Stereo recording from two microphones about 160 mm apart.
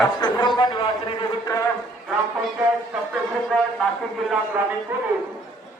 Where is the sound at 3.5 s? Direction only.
10° left (ahead or behind).